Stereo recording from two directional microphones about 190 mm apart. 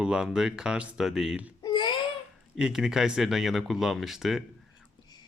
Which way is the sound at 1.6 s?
25° left (ahead or behind).